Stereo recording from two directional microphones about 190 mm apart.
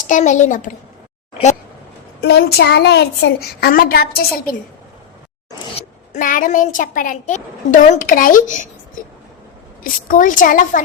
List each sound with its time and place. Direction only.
0.1 s a child's voice: 40° left (ahead or behind)
2.2 s speech: 60° left (ahead or behind)
3.7 s speech: 50° left (ahead or behind)
5.7 s speech: 45° left (ahead or behind)
9.8 s speech: 45° left (ahead or behind)